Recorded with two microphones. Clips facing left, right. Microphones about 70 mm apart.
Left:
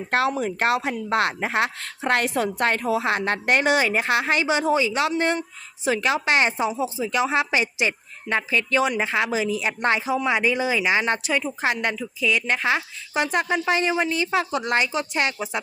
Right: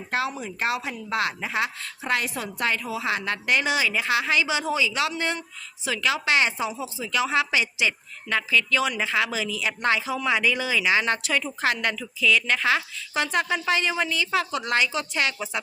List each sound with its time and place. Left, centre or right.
0.1 s speech: left